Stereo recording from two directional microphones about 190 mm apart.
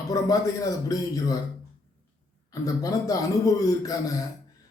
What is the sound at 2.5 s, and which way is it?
A man's voice, 20° left (ahead or behind).